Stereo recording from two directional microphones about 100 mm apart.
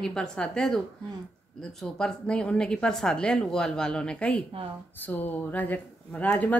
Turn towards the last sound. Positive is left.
turn(degrees=15)  # may be behind; listen again after turning